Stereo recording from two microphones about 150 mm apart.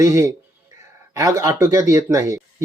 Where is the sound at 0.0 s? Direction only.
20° right (ahead or behind).